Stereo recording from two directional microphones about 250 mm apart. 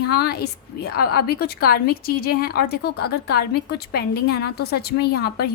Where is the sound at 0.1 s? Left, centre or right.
Left.